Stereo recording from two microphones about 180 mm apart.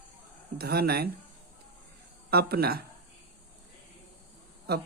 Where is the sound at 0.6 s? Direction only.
60° right (ahead or behind).